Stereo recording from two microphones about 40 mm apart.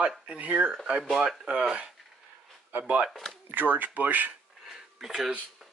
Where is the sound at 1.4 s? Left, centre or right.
Right.